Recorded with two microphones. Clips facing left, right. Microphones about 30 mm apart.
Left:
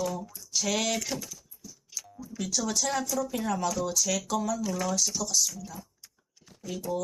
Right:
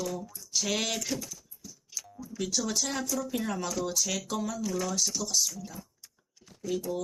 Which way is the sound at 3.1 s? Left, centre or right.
Centre.